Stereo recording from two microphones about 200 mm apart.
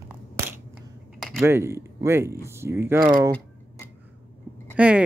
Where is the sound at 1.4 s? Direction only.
10° right (ahead or behind).